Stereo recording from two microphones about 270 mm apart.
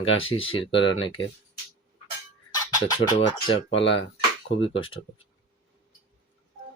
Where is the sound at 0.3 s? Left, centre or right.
Centre.